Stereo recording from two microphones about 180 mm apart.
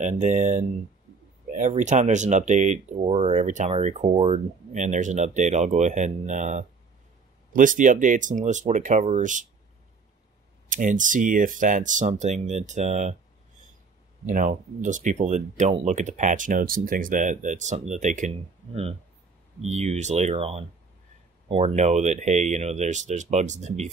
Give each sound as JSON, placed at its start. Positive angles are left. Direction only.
{"t": 0.0, "sound": "speech", "side_deg": -45}
{"t": 10.7, "sound": "speech", "side_deg": -45}
{"t": 14.2, "sound": "speech", "side_deg": -45}